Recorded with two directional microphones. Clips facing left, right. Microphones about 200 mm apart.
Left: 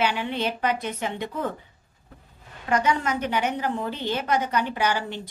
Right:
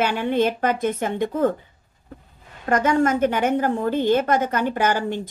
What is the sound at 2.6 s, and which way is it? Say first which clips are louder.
A woman's voice: right 5 dB; 50° right (ahead or behind).